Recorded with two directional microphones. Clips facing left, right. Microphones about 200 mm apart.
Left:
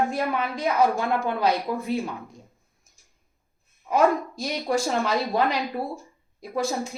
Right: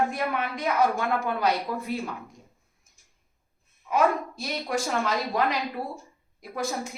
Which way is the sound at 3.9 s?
35° left (ahead or behind).